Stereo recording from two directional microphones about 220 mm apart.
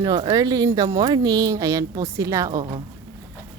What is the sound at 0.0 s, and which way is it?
Speech, 15° right (ahead or behind).